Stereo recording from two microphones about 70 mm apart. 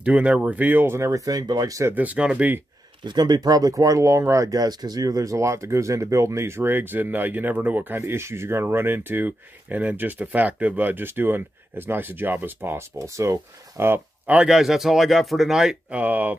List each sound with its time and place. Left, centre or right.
0.0 s speech: centre; by 1.8 s right
2.0 s speech: right
3.1 s speech: right
8.0 s speech: right
13.0 s speech: right
14.4 s speech: centre
15.9 s speech: right